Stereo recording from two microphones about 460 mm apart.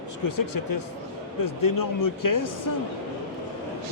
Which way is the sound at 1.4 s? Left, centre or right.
Left.